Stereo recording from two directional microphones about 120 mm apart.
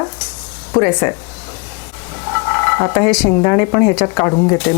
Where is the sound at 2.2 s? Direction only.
25° left (ahead or behind).